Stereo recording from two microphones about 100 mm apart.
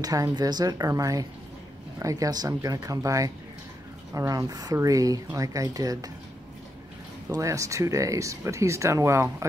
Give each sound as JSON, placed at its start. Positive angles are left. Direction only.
{"t": 0.0, "sound": "speech", "side_deg": -40}
{"t": 7.2, "sound": "speech", "side_deg": -35}